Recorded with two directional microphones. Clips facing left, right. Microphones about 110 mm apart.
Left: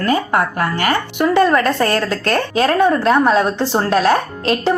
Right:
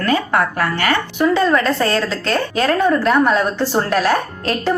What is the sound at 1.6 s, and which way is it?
Speech, 55° left (ahead or behind).